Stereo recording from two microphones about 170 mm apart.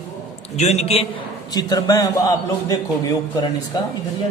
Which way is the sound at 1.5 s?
20° left (ahead or behind).